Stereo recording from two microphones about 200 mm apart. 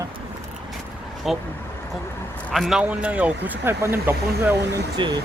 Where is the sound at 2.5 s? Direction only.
Centre (ahead or behind).